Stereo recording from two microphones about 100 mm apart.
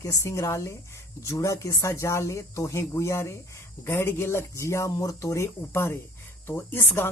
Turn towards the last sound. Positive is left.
turn(degrees=20)  # may be behind; listen again after turning